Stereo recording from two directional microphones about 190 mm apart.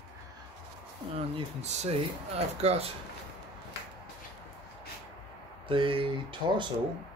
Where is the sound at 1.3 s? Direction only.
35° right (ahead or behind).